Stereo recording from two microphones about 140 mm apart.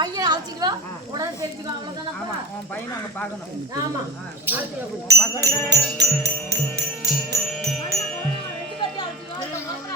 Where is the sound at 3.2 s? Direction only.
15° left (ahead or behind).